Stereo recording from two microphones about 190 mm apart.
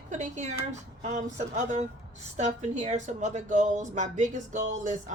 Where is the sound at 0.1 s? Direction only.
40° right (ahead or behind).